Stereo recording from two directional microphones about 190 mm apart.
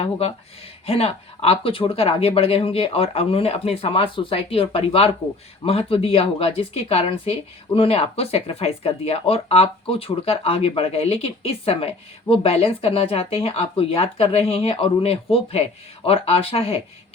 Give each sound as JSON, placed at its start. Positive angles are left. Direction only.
{"t": 0.0, "sound": "speech", "side_deg": 30}